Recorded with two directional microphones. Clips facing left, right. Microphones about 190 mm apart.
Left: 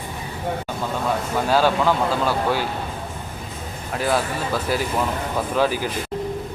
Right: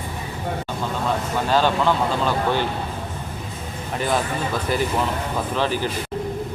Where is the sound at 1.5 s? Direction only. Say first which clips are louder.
Left 1 dB; 10° left (ahead or behind).